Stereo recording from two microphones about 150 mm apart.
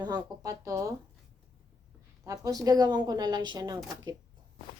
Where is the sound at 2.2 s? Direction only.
20° right (ahead or behind).